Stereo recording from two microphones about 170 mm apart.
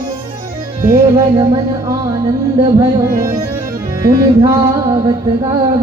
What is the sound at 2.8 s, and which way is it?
Speech, 20° right (ahead or behind).